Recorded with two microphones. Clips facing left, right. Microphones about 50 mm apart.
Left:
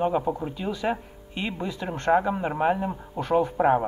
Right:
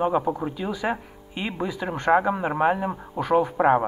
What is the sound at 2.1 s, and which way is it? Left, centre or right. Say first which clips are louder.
Speech: right 3 dB; right.